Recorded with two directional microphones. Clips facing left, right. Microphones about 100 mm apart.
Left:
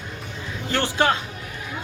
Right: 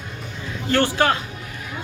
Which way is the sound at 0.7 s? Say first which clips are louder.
Right 3 dB; 15° left (ahead or behind).